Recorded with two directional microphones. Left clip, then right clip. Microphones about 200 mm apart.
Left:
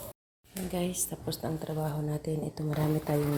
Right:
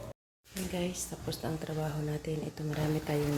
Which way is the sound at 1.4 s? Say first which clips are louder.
Left 2 dB; 15° left (ahead or behind).